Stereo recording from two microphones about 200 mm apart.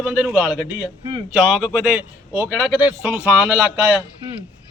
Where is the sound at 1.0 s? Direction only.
25° right (ahead or behind).